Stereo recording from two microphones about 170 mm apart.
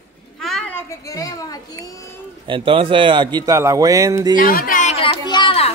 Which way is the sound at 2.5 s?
30° right (ahead or behind).